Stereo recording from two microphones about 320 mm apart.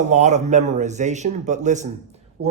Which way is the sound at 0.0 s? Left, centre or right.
Right.